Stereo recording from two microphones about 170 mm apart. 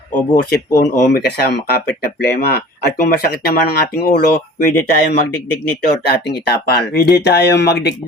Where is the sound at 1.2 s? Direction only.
75° left (ahead or behind).